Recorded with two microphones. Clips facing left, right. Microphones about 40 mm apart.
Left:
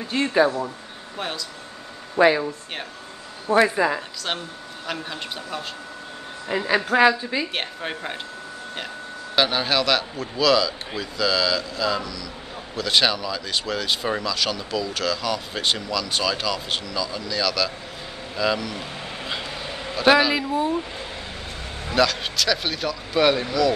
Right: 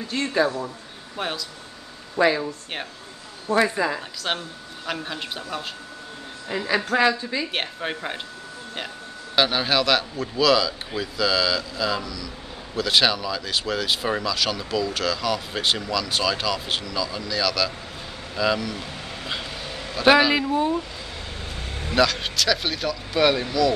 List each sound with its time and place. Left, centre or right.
0.1 s a woman's voice: centre
1.1 s speech: centre
2.1 s a woman's voice: centre
4.3 s speech: centre
6.5 s a woman's voice: centre
7.5 s speech: centre
9.3 s speech: centre
20.0 s speech: centre
21.9 s speech: centre